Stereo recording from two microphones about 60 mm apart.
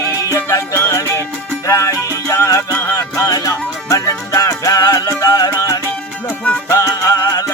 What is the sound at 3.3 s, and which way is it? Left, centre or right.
Music, left.